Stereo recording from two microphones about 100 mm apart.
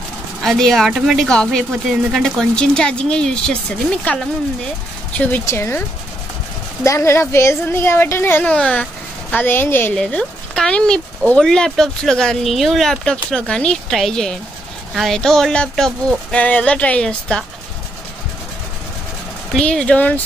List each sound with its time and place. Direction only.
0.4 s speech: 5° left (ahead or behind)
5.4 s a woman's voice: 25° left (ahead or behind); by 8.8 s 10° left (ahead or behind)
9.3 s a woman's voice: 20° left (ahead or behind)
9.9 s speech: 10° left (ahead or behind)
19.5 s speech: 10° left (ahead or behind)